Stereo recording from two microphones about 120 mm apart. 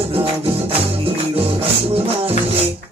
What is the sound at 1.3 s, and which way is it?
Music, 50° right (ahead or behind).